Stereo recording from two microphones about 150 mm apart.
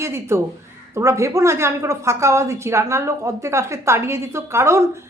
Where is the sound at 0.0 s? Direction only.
20° right (ahead or behind).